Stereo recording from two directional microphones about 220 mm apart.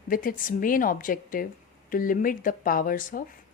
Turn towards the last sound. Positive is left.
turn(degrees=40)  # may be behind; listen again after turning